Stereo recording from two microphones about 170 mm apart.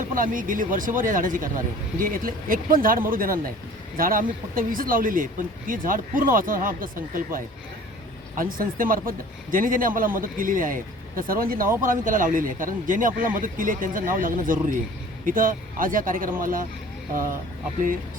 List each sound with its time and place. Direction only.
0.0 s speech: 50° right (ahead or behind)